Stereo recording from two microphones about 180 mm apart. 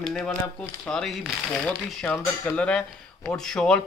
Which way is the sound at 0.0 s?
5° left (ahead or behind).